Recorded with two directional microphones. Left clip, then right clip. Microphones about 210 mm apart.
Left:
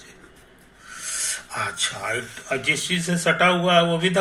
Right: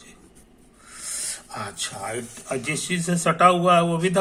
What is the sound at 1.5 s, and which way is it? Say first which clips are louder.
A man's voice: left 6 dB; 20° right (ahead or behind).